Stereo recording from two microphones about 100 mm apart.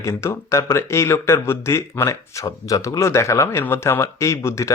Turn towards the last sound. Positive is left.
turn(degrees=30)  # may be behind; listen again after turning